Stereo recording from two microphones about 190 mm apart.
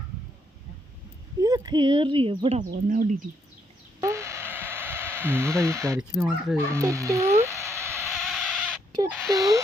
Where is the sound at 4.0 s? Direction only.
15° right (ahead or behind).